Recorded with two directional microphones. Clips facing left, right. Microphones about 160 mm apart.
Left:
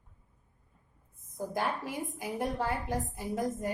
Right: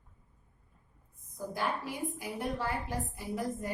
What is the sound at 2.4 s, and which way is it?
A woman's voice, 45° left (ahead or behind).